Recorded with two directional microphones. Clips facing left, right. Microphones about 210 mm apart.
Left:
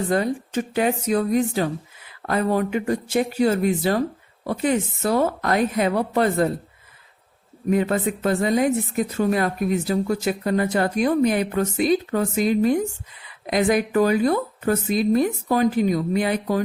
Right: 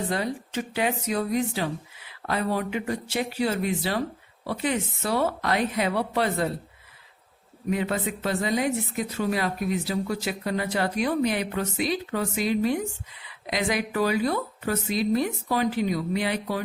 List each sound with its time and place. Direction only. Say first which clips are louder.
0.1 s speech: left 6 dB; 50° left (ahead or behind)
7.7 s speech: left 6 dB; 50° left (ahead or behind)